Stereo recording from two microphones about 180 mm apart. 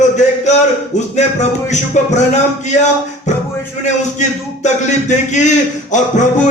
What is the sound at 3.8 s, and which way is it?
A man's voice, 40° left (ahead or behind).